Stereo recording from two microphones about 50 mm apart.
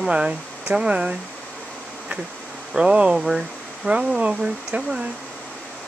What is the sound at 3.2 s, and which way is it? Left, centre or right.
Speech, centre.